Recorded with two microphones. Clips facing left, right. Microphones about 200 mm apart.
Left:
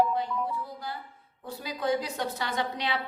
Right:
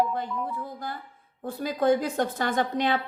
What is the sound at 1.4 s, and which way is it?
A woman's voice, 50° right (ahead or behind).